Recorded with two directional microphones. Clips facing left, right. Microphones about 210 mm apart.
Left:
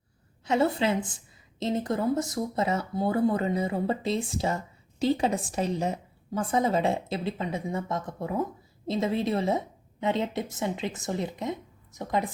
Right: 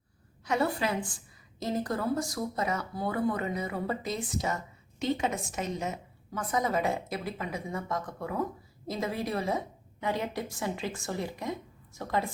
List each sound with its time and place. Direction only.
0.4 s a woman's voice: 25° left (ahead or behind)